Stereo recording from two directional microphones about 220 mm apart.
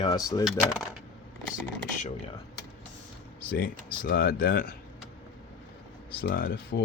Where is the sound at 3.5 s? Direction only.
40° left (ahead or behind).